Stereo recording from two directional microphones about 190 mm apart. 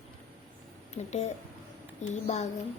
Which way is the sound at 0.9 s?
35° left (ahead or behind).